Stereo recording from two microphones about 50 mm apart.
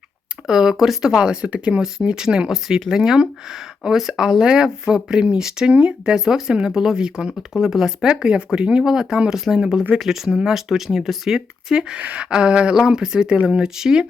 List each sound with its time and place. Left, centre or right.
0.4 s speech: centre
8.1 s speech: centre
8.8 s speech: centre